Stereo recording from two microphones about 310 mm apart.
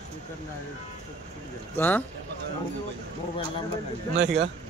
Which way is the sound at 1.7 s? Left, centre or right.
Centre.